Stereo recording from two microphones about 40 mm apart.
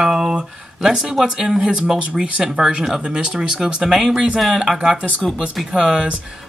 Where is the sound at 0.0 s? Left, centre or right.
Centre.